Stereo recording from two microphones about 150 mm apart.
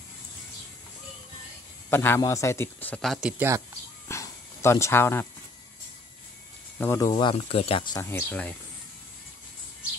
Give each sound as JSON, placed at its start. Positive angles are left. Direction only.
{"t": 1.9, "sound": "a man's voice", "side_deg": 15}
{"t": 4.1, "sound": "a sound", "side_deg": 20}
{"t": 6.8, "sound": "a man's voice", "side_deg": 15}
{"t": 7.1, "sound": "speech", "side_deg": 35}
{"t": 7.9, "sound": "a man's voice", "side_deg": 15}